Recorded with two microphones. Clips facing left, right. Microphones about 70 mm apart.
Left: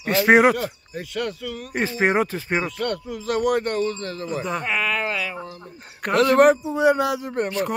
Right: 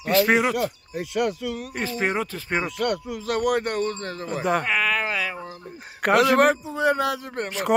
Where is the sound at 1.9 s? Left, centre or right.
Left.